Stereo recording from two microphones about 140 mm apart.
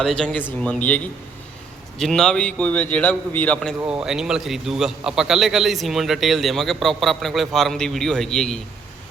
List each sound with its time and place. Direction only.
0.0 s a man's voice: 5° left (ahead or behind)
3.8 s a man's voice: 10° right (ahead or behind)